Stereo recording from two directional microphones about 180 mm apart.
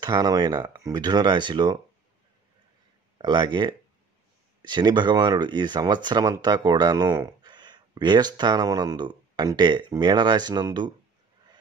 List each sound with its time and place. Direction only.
0.0 s speech: 20° right (ahead or behind)
3.2 s speech: 25° right (ahead or behind)